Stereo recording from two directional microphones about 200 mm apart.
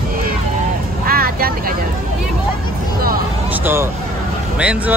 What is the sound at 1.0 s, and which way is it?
Vehicle, 45° right (ahead or behind).